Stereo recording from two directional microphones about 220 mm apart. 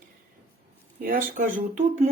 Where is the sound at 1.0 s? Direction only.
40° right (ahead or behind).